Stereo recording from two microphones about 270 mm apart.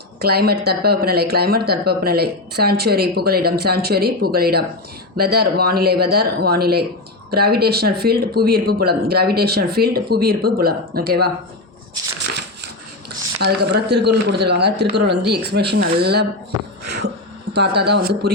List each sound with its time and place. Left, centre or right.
0.2 s speech: right
13.4 s speech: right
16.8 s beatboxing: right
17.5 s speech: right